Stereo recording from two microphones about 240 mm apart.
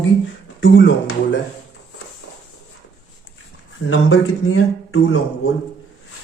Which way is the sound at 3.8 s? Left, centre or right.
Left.